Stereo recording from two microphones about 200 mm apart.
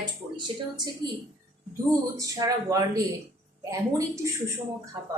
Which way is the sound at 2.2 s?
15° right (ahead or behind).